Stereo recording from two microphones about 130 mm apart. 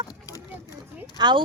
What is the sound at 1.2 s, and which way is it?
Speech, 35° right (ahead or behind).